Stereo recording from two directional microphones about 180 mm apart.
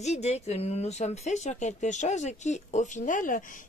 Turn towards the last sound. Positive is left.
turn(degrees=45)  # may be behind; listen again after turning